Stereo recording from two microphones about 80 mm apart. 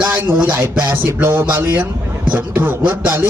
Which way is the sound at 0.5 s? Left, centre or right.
Right.